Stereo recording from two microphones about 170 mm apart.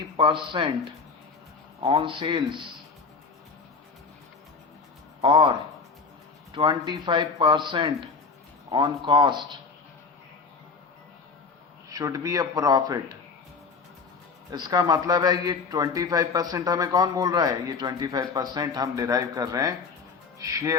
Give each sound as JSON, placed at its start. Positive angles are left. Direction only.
{"t": 0.2, "sound": "a man's voice", "side_deg": -30}
{"t": 1.8, "sound": "a man's voice", "side_deg": -30}
{"t": 5.2, "sound": "a man's voice", "side_deg": -30}
{"t": 11.9, "sound": "a man's voice", "side_deg": -20}
{"t": 14.5, "sound": "a man's voice", "side_deg": -20}